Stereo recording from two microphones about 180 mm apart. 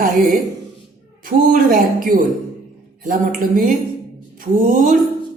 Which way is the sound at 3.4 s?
50° right (ahead or behind).